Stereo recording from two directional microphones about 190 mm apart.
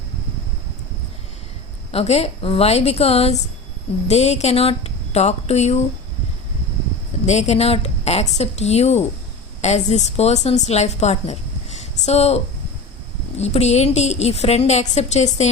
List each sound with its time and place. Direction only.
1.9 s a woman's voice: 30° left (ahead or behind)
7.3 s a woman's voice: 35° left (ahead or behind)
13.4 s a woman's voice: 35° left (ahead or behind)